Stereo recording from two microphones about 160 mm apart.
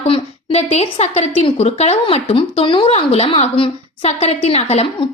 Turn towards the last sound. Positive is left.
turn(degrees=40)  # may be behind; listen again after turning